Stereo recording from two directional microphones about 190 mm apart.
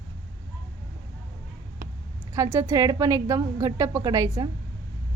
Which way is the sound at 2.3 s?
15° right (ahead or behind).